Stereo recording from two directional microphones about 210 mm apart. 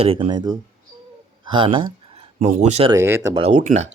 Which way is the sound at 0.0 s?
25° right (ahead or behind).